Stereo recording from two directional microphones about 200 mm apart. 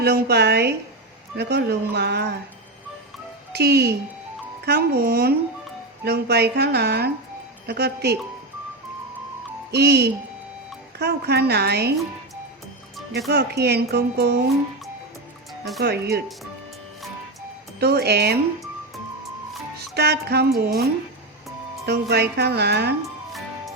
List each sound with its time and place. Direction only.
0.0 s speech: 55° right (ahead or behind)
3.5 s speech: 55° right (ahead or behind)
9.7 s speech: 55° right (ahead or behind)
13.2 s speech: 55° right (ahead or behind)
15.8 s speech: 55° right (ahead or behind)
17.7 s speech: 55° right (ahead or behind)
19.9 s speech: 55° right (ahead or behind)